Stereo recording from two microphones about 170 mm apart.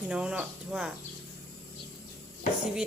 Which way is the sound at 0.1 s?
5° right (ahead or behind).